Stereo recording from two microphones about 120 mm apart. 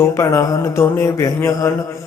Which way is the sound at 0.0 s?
20° left (ahead or behind).